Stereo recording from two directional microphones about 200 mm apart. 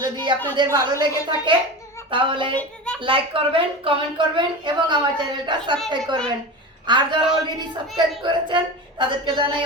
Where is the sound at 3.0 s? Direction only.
25° right (ahead or behind).